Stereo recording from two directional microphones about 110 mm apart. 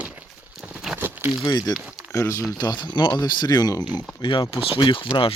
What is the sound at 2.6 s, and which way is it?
Speech, 40° left (ahead or behind).